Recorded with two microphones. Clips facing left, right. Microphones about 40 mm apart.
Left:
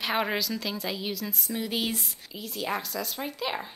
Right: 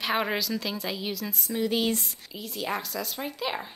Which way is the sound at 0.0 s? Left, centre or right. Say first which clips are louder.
Even; centre.